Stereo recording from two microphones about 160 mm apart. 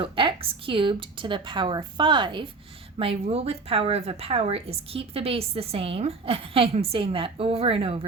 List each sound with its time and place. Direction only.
0.0 s a woman's voice: 35° right (ahead or behind)